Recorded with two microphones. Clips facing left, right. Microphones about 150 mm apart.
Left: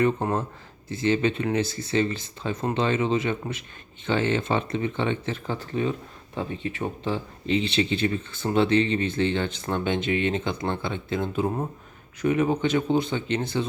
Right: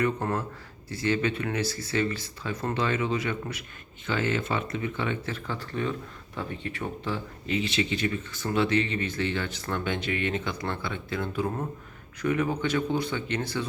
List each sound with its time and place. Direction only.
0.0 s speech: 20° left (ahead or behind)